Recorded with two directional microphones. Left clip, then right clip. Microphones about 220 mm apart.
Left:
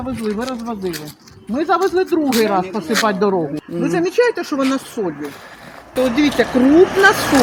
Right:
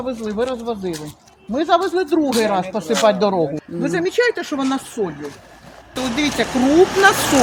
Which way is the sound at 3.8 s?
Centre (ahead or behind).